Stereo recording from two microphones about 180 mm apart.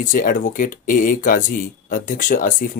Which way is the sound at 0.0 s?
50° left (ahead or behind).